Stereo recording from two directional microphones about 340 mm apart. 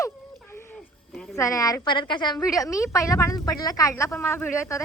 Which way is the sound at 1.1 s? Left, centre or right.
Centre.